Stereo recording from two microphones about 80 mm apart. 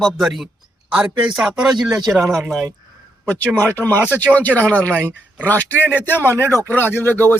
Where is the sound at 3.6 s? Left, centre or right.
Left.